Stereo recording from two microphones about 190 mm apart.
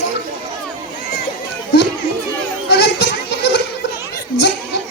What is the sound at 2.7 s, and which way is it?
Children playing, 65° left (ahead or behind).